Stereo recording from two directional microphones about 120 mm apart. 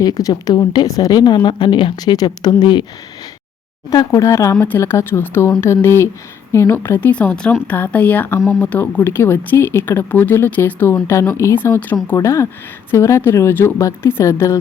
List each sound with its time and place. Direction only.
0.0 s speech: 30° left (ahead or behind)
3.8 s speech: 30° left (ahead or behind)